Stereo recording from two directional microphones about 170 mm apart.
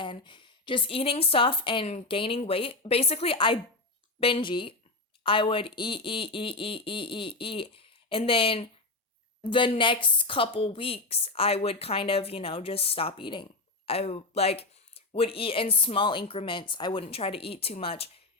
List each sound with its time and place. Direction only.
0.0 s a woman's voice: 30° left (ahead or behind)